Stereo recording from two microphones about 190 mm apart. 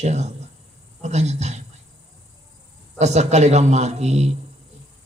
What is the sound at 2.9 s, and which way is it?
A man's voice, 35° right (ahead or behind).